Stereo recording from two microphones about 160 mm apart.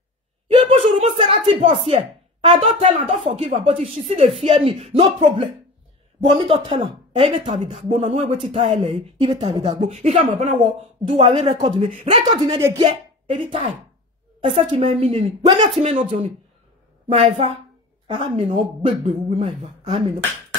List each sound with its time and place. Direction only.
0.5 s a woman's voice: 35° right (ahead or behind)